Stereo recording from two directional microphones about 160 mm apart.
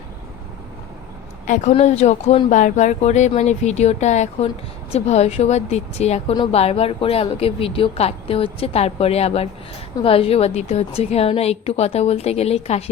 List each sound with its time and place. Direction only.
1.5 s speech: 50° left (ahead or behind)
6.3 s speech: 30° left (ahead or behind)
6.6 s a woman's voice: 40° left (ahead or behind)